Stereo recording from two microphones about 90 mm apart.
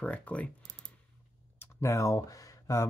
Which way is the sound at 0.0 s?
15° left (ahead or behind).